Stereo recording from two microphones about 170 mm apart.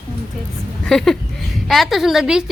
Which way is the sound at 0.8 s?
5° left (ahead or behind).